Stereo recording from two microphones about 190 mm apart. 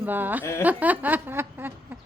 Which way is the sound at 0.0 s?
10° right (ahead or behind).